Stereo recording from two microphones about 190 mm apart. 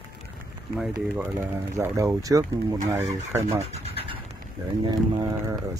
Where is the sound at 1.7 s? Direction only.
15° right (ahead or behind).